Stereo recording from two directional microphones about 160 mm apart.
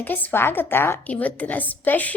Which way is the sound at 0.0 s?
10° left (ahead or behind).